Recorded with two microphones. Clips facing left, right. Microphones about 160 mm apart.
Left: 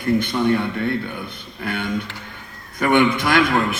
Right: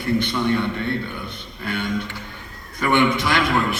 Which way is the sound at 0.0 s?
50° left (ahead or behind).